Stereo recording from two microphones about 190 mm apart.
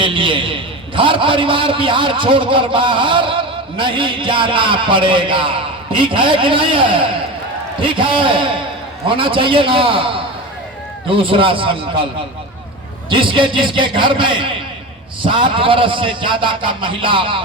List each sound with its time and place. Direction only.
0.0 s a man's voice: 25° right (ahead or behind)
11.1 s a man's voice: 30° right (ahead or behind)
13.1 s a man's voice: 25° right (ahead or behind)